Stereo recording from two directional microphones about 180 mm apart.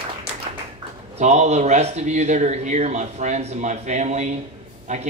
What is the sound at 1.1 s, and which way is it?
A man's voice, 40° right (ahead or behind).